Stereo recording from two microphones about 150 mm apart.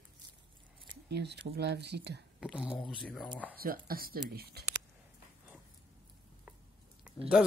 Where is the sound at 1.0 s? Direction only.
90° right.